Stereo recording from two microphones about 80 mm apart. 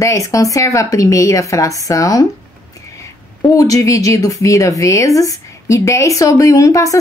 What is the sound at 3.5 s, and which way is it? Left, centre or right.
Speech, left.